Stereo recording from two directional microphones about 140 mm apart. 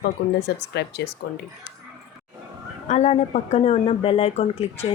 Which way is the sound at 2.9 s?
55° left (ahead or behind).